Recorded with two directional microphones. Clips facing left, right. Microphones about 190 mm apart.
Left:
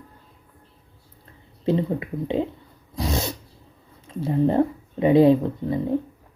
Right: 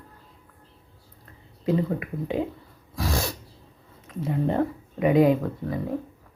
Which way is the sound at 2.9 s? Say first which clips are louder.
Left 2 dB; 20° left (ahead or behind).